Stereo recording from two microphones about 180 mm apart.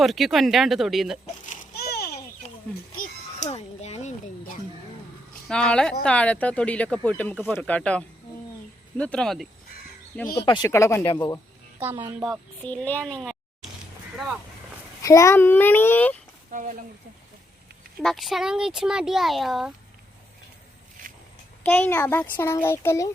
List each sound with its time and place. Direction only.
0.0 s speech: centre (ahead or behind)
1.7 s a sound: 60° left (ahead or behind)
2.4 s a sound: 35° left (ahead or behind)
3.0 s music: 40° left (ahead or behind)
5.5 s speech: 5° left (ahead or behind)
10.4 s speech: 25° left (ahead or behind)
11.8 s a woman's voice: 10° right (ahead or behind)
12.2 s speech: 5° left (ahead or behind)
15.0 s speech: 15° left (ahead or behind)
18.0 s speech: centre (ahead or behind)
21.6 s speech: 10° left (ahead or behind)